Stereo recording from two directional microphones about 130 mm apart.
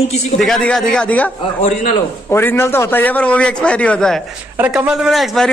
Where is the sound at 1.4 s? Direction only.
55° left (ahead or behind).